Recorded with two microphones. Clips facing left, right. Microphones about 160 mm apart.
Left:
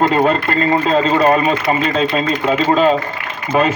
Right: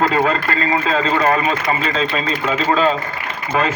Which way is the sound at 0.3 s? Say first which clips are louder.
Left 4 dB; 30° left (ahead or behind).